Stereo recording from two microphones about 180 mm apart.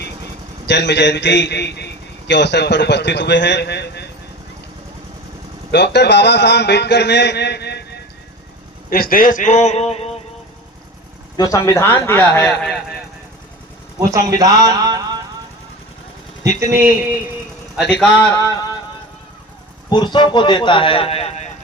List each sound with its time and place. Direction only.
0.7 s a man's voice: 70° left (ahead or behind)
5.7 s a man's voice: 70° left (ahead or behind)
8.9 s a man's voice: 55° left (ahead or behind); by 10.1 s 35° left (ahead or behind)
11.3 s speech: 20° left (ahead or behind)
12.6 s a man's voice: centre (ahead or behind)
14.3 s a sound: 20° right (ahead or behind)
16.4 s speech: 15° right (ahead or behind)
18.0 s speech: 10° left (ahead or behind)
19.9 s a man's voice: 25° left (ahead or behind)